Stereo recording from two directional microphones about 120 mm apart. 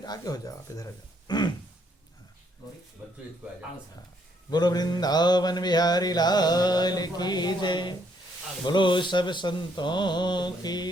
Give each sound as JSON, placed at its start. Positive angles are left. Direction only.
{"t": 0.0, "sound": "mantra", "side_deg": 35}
{"t": 1.3, "sound": "mantra", "side_deg": 40}
{"t": 4.5, "sound": "mantra", "side_deg": 35}